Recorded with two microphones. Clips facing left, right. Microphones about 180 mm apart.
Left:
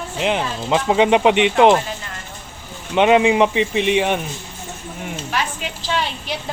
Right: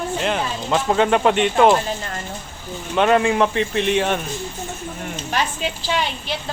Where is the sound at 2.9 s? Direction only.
15° left (ahead or behind).